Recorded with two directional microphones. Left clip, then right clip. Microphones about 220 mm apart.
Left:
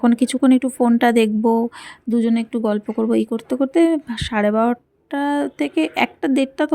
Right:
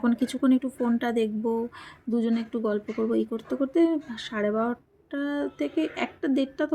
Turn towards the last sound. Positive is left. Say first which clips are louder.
# left 7 dB
turn(degrees=45)  # may be behind; listen again after turning